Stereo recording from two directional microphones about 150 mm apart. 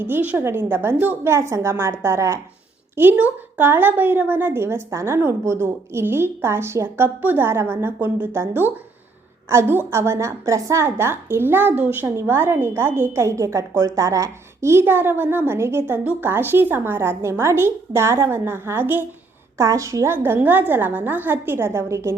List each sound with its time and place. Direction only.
0.0 s a woman's voice: 10° right (ahead or behind)